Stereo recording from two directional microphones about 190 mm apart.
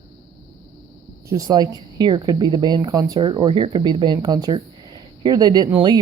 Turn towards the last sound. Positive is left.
turn(degrees=-25)  # may be behind; listen again after turning